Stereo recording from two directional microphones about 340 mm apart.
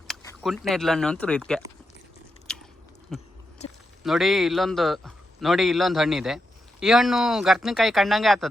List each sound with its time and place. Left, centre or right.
0.1 s speech: centre
2.5 s biting: centre
3.1 s speech: centre
3.6 s speech: centre
4.0 s speech: centre